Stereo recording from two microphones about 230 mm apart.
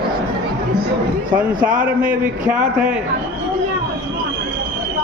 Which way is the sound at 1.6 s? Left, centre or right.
Right.